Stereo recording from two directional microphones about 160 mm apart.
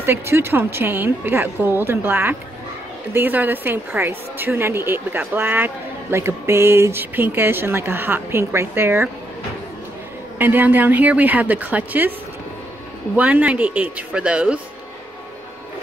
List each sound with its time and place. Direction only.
0.0 s a woman's voice: 15° right (ahead or behind)
10.4 s a woman's voice: 10° right (ahead or behind)
13.1 s a woman's voice: 10° right (ahead or behind)